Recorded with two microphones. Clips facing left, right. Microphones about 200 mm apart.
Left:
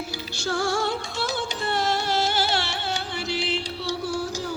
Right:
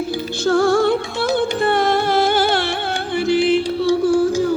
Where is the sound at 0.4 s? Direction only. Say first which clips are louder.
Right 11 dB; 55° right (ahead or behind).